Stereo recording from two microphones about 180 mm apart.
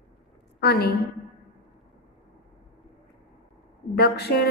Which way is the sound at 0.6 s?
65° left (ahead or behind).